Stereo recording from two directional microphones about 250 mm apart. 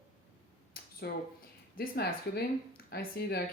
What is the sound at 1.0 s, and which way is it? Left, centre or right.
Speech, left.